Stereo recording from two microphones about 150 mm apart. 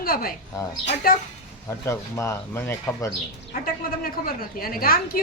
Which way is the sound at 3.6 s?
75° left (ahead or behind).